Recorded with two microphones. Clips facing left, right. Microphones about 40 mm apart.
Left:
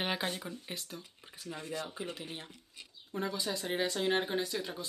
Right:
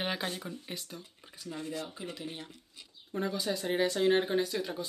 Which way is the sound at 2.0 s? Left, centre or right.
Left.